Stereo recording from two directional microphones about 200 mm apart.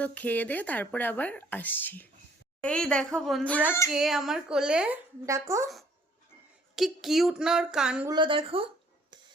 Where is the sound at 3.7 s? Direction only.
15° left (ahead or behind).